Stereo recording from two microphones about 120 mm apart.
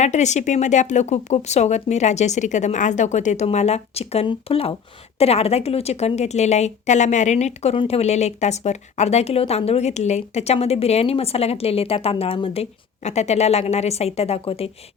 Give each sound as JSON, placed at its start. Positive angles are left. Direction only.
{"t": 0.0, "sound": "a woman's voice", "side_deg": 75}
{"t": 13.1, "sound": "a woman's voice", "side_deg": 65}